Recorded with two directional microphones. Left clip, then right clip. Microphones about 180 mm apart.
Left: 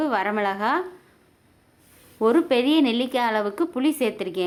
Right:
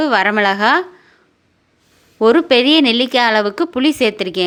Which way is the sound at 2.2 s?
20° right (ahead or behind).